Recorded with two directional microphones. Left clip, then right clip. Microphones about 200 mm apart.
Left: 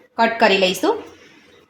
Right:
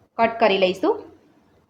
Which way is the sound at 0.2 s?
35° left (ahead or behind).